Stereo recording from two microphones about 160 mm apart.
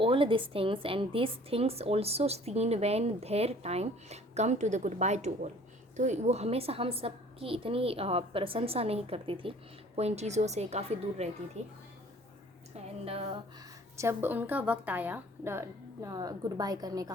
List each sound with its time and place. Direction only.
0.0 s a woman's voice: 35° right (ahead or behind)
13.1 s a woman's voice: 35° right (ahead or behind)
13.9 s a woman's voice: 15° right (ahead or behind)